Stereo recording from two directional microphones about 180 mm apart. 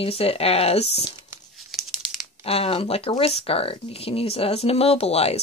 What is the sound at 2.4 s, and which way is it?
Speech, 35° left (ahead or behind).